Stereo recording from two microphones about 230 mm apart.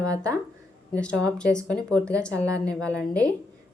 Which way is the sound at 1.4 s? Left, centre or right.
Centre.